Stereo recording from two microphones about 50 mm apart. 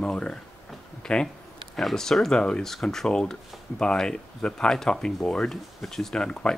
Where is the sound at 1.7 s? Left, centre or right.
Centre.